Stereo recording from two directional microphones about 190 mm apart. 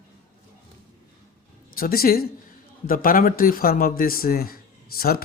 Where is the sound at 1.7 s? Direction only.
50° left (ahead or behind).